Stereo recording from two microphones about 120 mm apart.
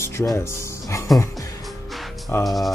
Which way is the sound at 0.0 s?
20° left (ahead or behind).